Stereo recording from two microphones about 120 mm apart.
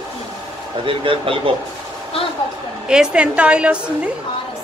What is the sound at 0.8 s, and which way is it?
Speech, 45° right (ahead or behind).